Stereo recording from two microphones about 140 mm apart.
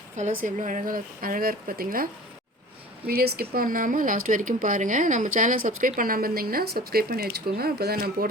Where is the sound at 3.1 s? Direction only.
90° right.